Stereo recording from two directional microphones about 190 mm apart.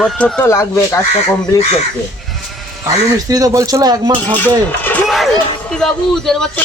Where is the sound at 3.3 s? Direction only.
20° right (ahead or behind).